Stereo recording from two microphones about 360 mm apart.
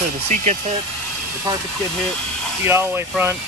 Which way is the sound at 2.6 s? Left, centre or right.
Centre.